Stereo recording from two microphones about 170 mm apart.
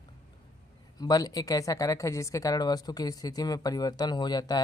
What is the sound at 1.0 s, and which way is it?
Speech, 20° left (ahead or behind).